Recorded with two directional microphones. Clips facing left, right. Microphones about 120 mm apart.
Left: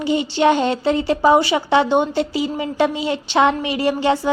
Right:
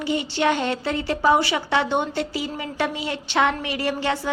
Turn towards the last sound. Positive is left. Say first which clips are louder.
# left 6 dB
turn(degrees=20)  # may be behind; listen again after turning